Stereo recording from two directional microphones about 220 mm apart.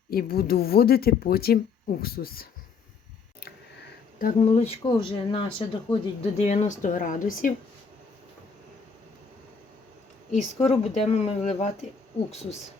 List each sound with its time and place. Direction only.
0.1 s speech: 45° left (ahead or behind)
4.2 s speech: 30° left (ahead or behind)
10.6 s speech: 30° left (ahead or behind)